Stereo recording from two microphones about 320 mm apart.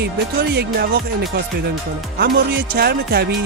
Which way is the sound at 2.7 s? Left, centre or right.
Right.